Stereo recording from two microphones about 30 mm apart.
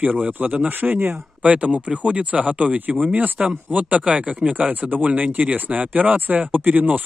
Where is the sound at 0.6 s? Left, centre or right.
Right.